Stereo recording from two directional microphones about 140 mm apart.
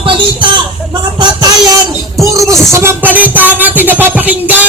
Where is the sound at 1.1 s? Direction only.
30° right (ahead or behind).